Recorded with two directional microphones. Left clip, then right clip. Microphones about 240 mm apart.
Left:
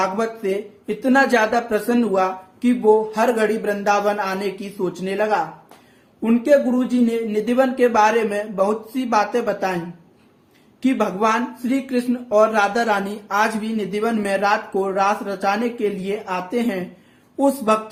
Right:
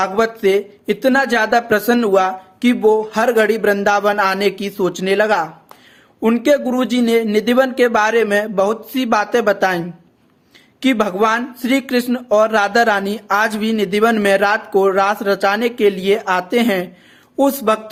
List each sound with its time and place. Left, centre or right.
0.0 s speech: right